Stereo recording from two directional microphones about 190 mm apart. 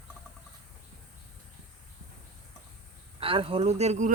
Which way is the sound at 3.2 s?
30° right (ahead or behind).